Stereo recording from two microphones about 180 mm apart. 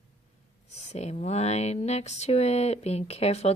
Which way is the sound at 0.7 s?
35° left (ahead or behind).